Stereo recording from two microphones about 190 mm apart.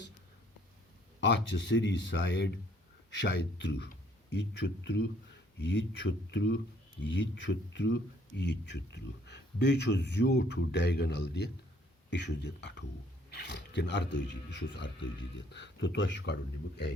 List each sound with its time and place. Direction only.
1.2 s speech: 70° left (ahead or behind)
6.1 s speech: 70° left (ahead or behind)